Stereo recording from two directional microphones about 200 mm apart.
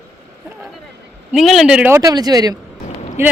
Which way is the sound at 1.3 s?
Centre (ahead or behind).